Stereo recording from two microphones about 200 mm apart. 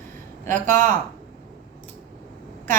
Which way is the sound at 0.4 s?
40° right (ahead or behind).